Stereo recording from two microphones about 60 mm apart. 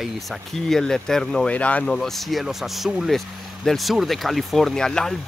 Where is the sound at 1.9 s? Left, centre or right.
Centre.